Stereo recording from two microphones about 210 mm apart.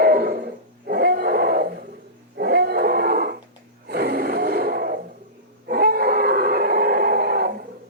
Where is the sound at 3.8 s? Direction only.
50° right (ahead or behind).